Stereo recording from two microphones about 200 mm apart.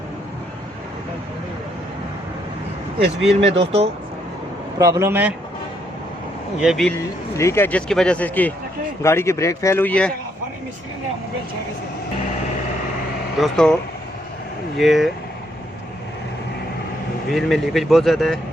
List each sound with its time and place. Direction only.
3.4 s speech: 30° right (ahead or behind)
4.8 s a man's voice: 15° right (ahead or behind)
6.6 s speech: centre (ahead or behind)
7.3 s speech: 15° left (ahead or behind)
13.4 s speech: 5° left (ahead or behind)
14.8 s speech: centre (ahead or behind)
17.2 s speech: centre (ahead or behind)